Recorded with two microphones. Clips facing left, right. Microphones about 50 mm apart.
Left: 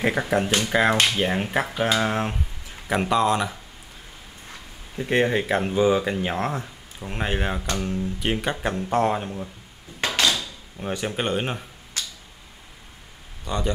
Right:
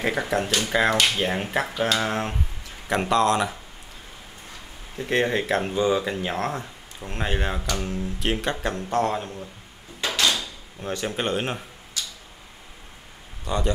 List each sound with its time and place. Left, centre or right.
0.0 s speech: centre
4.9 s speech: centre
9.9 s drawer open or close: left
10.8 s speech: centre
12.0 s a sound: left
13.5 s speech: centre